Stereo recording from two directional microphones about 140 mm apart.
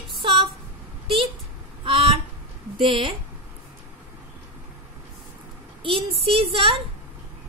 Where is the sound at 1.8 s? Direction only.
40° right (ahead or behind).